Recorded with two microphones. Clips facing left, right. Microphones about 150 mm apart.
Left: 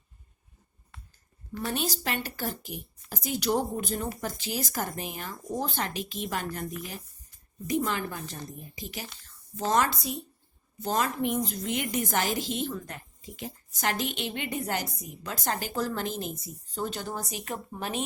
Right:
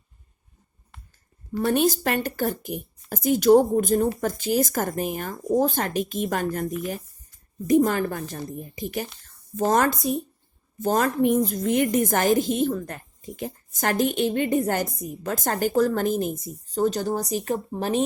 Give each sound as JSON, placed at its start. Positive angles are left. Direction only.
{"t": 1.5, "sound": "a woman's voice", "side_deg": -55}
{"t": 7.9, "sound": "a woman's voice", "side_deg": -45}